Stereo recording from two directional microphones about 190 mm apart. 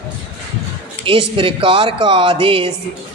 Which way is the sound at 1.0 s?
30° right (ahead or behind).